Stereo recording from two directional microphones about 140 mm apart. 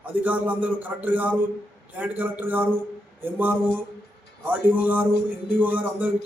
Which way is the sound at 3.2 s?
15° right (ahead or behind).